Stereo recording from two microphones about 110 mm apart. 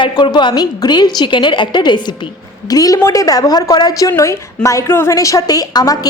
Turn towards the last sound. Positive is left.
turn(degrees=35)  # may be behind; listen again after turning